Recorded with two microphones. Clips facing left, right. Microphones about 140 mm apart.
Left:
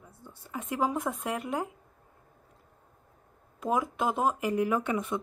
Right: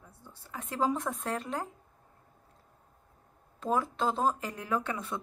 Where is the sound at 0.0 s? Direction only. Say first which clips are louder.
Left 3 dB; 15° left (ahead or behind).